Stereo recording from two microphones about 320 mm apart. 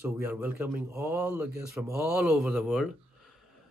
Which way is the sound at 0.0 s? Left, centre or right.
Centre.